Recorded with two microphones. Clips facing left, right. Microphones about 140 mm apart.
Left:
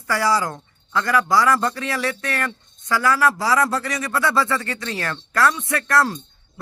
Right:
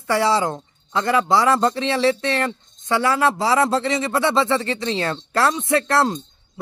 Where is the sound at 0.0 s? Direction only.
25° right (ahead or behind).